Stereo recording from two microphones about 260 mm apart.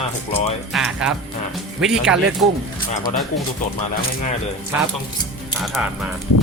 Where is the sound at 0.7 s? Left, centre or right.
Centre.